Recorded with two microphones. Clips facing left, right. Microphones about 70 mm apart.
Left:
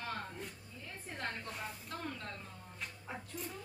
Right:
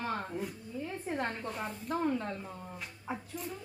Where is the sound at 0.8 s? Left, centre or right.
Right.